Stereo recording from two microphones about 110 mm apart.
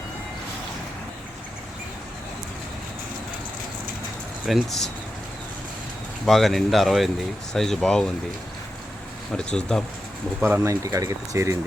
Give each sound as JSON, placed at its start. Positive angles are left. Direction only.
{"t": 4.4, "sound": "speech", "side_deg": 0}
{"t": 6.2, "sound": "speech", "side_deg": 0}
{"t": 9.3, "sound": "speech", "side_deg": 5}
{"t": 10.4, "sound": "speech", "side_deg": -25}